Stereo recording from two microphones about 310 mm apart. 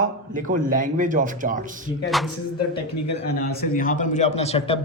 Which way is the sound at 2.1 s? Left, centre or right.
Centre.